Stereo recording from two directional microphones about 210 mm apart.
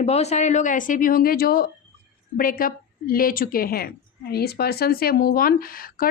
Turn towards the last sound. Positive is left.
turn(degrees=45)  # may be behind; listen again after turning